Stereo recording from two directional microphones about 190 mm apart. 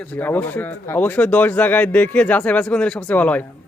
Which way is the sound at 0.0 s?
10° left (ahead or behind).